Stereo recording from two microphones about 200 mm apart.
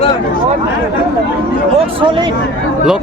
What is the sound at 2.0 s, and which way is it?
Speech, 25° right (ahead or behind).